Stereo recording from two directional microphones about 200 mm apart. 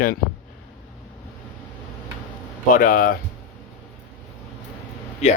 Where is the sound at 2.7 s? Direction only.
45° left (ahead or behind).